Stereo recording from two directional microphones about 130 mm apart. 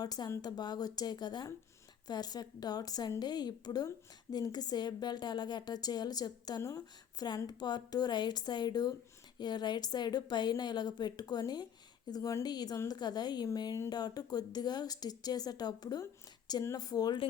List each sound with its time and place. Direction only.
0.0 s a woman's voice: 30° left (ahead or behind)